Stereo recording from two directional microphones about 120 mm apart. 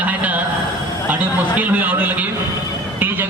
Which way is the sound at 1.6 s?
15° right (ahead or behind).